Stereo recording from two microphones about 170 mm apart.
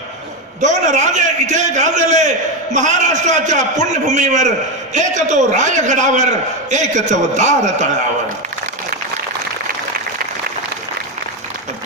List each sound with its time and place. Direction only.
0.6 s a man's voice: 45° right (ahead or behind)